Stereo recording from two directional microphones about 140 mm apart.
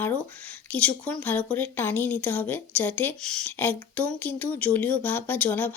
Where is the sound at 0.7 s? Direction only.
10° left (ahead or behind).